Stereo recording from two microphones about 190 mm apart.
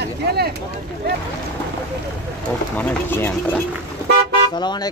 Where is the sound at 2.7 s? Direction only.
10° left (ahead or behind).